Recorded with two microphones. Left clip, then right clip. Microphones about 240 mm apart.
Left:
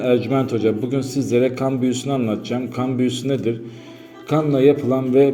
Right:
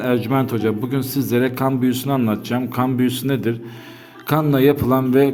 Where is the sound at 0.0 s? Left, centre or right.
Right.